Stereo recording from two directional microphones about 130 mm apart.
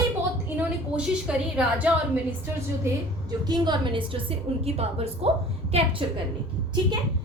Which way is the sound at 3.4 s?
35° right (ahead or behind).